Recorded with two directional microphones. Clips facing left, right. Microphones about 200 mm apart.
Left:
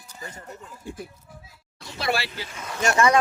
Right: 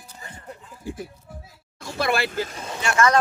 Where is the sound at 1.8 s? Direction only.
50° right (ahead or behind).